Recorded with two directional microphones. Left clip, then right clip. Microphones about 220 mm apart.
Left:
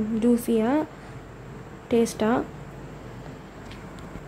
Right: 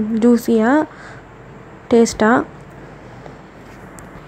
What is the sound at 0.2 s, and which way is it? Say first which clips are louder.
Speech: right 9 dB; 15° right (ahead or behind).